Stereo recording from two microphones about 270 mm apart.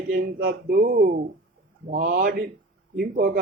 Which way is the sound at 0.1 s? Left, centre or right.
Right.